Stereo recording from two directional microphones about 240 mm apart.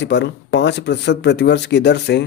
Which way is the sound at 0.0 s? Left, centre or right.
Left.